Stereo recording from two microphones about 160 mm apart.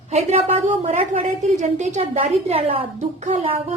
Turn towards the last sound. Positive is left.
turn(degrees=-35)  # may be behind; listen again after turning